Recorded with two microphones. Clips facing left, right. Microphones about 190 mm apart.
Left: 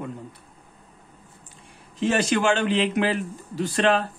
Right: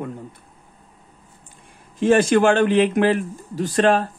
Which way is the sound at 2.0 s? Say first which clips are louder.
Right 7 dB; 50° right (ahead or behind).